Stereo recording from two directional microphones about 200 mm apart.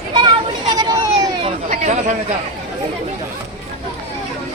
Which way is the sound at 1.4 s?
35° right (ahead or behind).